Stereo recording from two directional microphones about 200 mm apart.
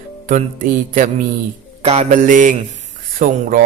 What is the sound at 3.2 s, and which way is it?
Music, 40° right (ahead or behind).